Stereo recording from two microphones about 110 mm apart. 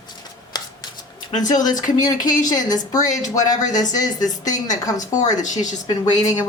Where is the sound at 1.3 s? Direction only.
35° left (ahead or behind).